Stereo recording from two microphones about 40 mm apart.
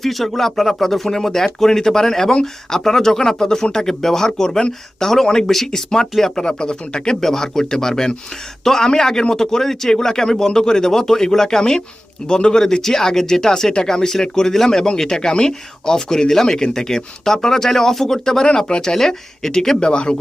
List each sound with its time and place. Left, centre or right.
0.0 s speech: centre; by 20.1 s left